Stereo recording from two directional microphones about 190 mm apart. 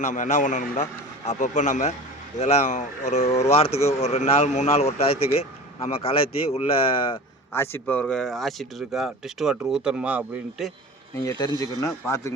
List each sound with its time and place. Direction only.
0.0 s speech: 40° left (ahead or behind)
7.5 s speech: 10° left (ahead or behind); by 10.7 s 5° right (ahead or behind)
11.2 s a man's voice: 20° left (ahead or behind)